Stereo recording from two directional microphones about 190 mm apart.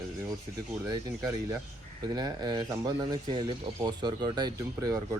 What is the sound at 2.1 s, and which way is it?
Speech, 20° right (ahead or behind).